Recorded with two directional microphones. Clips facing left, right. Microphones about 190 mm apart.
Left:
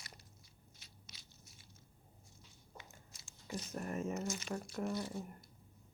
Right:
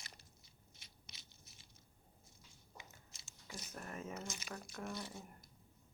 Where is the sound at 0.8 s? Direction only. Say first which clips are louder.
Left 1 dB; 25° right (ahead or behind).